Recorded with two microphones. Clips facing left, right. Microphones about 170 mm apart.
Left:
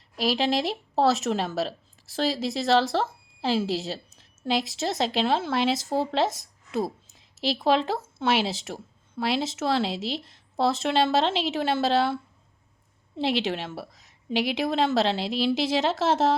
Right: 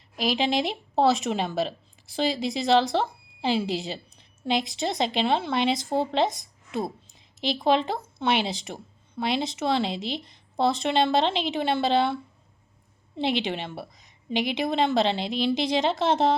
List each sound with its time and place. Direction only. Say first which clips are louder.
0.2 s speech: even; centre (ahead or behind)